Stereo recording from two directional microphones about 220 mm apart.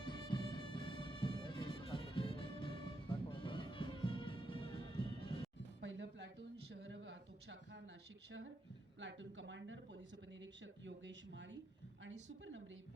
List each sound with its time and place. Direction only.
0.0 s music: 20° left (ahead or behind)
5.8 s a sound: 55° right (ahead or behind)
9.0 s speech: 55° right (ahead or behind)